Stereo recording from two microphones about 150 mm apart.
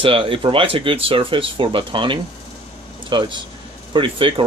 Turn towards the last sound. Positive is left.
turn(degrees=-35)  # may be behind; listen again after turning